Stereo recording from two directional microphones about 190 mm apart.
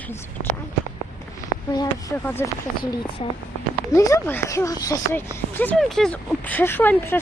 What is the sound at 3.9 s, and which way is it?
Speech, 15° left (ahead or behind).